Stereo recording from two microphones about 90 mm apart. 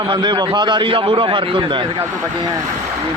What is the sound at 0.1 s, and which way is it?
A man's voice, 55° right (ahead or behind).